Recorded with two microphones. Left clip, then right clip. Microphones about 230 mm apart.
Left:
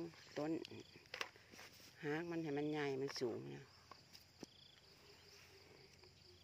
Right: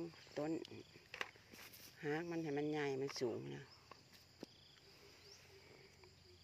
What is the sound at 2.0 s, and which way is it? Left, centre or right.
Speech, centre.